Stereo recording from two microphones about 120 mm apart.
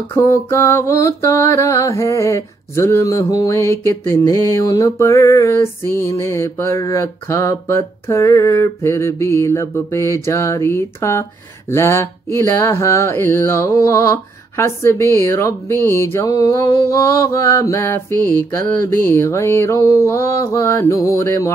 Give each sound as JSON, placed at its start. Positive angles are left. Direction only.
{"t": 0.1, "sound": "music", "side_deg": 25}
{"t": 16.3, "sound": "music", "side_deg": 30}